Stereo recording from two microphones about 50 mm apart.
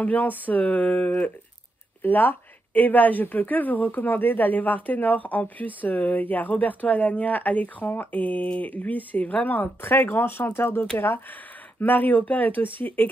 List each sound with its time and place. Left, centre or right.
0.0 s speech: left
11.8 s speech: left